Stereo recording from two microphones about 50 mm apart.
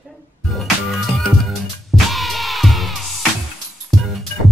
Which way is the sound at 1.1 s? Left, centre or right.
Centre.